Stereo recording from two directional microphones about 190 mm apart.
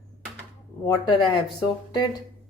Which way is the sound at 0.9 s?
20° left (ahead or behind).